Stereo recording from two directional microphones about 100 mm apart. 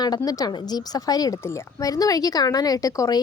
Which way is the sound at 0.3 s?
40° left (ahead or behind).